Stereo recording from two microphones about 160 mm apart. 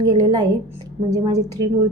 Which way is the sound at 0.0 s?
25° right (ahead or behind).